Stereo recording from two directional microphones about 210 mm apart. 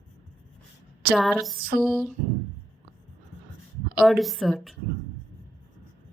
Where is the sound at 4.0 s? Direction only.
Centre (ahead or behind).